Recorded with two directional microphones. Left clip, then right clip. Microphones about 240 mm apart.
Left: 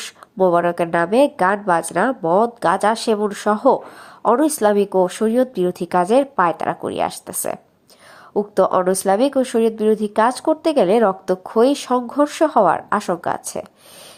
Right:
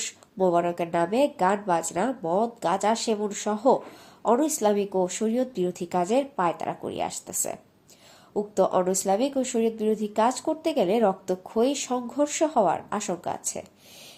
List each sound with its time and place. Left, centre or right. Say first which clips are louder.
0.0 s speech: left 7 dB; centre